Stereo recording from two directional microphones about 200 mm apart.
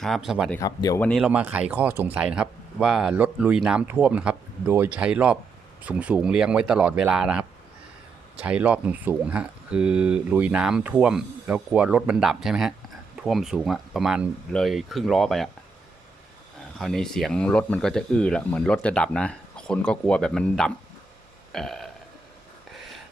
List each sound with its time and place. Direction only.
0.0 s speech: centre (ahead or behind)
0.6 s speech: 15° left (ahead or behind)
1.0 s speech: 5° right (ahead or behind)
16.7 s speech: centre (ahead or behind)
21.5 s burping: centre (ahead or behind)